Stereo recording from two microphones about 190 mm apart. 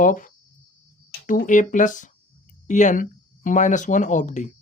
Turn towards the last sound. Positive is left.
turn(degrees=40)  # may be behind; listen again after turning